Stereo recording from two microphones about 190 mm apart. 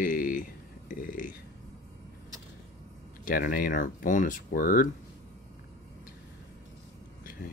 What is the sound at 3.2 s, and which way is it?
Speech, 50° left (ahead or behind).